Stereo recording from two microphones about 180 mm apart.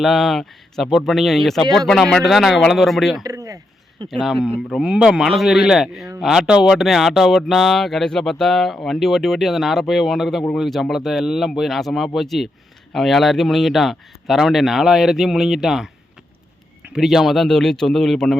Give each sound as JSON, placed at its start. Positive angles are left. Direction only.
{"t": 0.0, "sound": "speech", "side_deg": 0}
{"t": 3.2, "sound": "speech", "side_deg": -20}
{"t": 4.1, "sound": "speech", "side_deg": 0}